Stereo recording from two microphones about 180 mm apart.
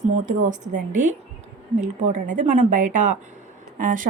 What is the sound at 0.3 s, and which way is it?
Speech, 45° right (ahead or behind).